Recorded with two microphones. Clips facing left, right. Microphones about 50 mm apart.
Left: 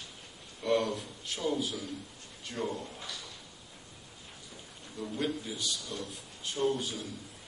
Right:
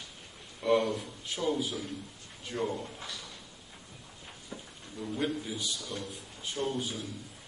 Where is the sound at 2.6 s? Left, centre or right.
Centre.